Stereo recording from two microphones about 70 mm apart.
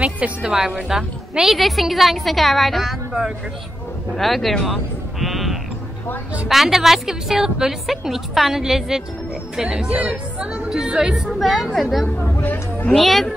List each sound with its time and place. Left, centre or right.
0.0 s a woman's voice: centre
5.2 s sheep: centre
6.5 s a woman's voice: centre
11.2 s a woman's voice: centre
12.3 s speech: left
12.9 s a woman's voice: centre